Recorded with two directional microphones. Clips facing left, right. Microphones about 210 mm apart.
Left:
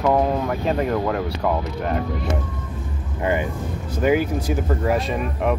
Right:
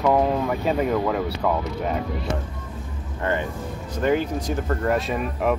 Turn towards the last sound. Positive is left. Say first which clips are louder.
# left 1 dB
turn(degrees=0)  # may be behind; listen again after turning